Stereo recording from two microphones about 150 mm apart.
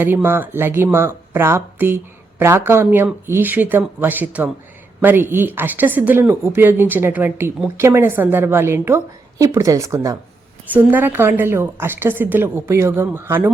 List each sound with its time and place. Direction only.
0.0 s speech: 15° right (ahead or behind)